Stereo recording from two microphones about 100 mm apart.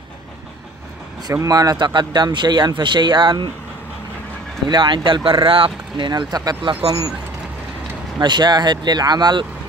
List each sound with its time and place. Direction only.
1.3 s speech: 35° right (ahead or behind)
4.6 s speech: 50° right (ahead or behind)
6.6 s speech: 60° right (ahead or behind)
8.2 s speech: 50° right (ahead or behind)